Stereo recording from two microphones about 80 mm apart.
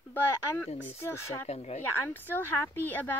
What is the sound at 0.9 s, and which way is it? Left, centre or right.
Speech, left.